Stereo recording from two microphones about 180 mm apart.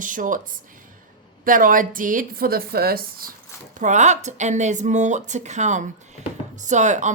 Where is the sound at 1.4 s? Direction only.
50° right (ahead or behind).